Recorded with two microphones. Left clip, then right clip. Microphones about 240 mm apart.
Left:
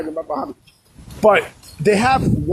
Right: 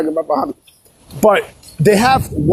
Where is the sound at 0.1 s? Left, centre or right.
Right.